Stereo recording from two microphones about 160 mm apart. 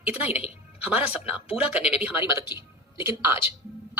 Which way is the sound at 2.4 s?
25° left (ahead or behind).